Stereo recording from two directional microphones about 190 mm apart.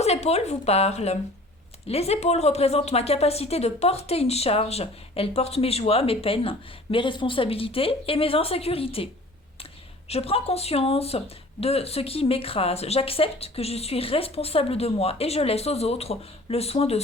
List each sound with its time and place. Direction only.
0.0 s speech: 35° left (ahead or behind)
10.1 s speech: 30° left (ahead or behind)